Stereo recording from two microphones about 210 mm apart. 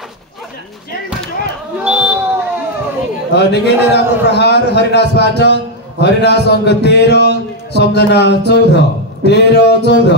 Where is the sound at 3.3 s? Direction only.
55° left (ahead or behind).